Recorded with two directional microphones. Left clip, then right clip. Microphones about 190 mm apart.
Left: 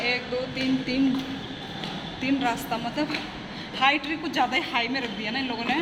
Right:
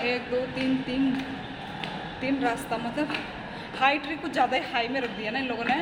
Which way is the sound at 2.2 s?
Centre (ahead or behind).